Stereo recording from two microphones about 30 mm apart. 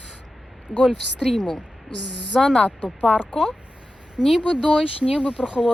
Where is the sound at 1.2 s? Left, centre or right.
Centre.